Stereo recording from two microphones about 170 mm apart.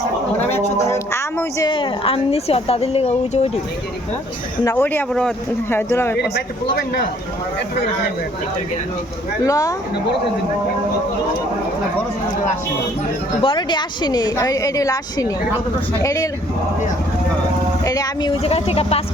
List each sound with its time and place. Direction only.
0.5 s a woman's voice: 15° left (ahead or behind); by 3.5 s 40° left (ahead or behind)
4.6 s speech: 10° left (ahead or behind)
9.4 s a woman's voice: 20° left (ahead or behind)
13.4 s a woman's voice: 30° left (ahead or behind)
17.8 s a woman's voice: 20° left (ahead or behind); by 19.0 s 35° left (ahead or behind)